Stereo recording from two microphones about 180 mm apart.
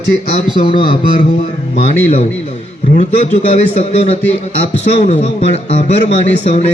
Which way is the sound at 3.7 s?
35° left (ahead or behind).